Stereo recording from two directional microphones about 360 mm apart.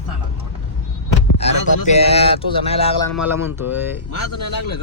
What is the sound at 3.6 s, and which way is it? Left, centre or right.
Speech, left.